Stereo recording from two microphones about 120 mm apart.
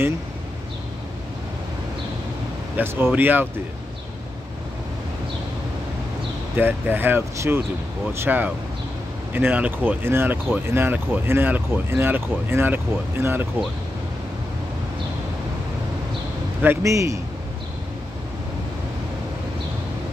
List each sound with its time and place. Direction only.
2.8 s speech: 20° right (ahead or behind)
6.5 s speech: 15° right (ahead or behind)
16.6 s a man's voice: 25° right (ahead or behind)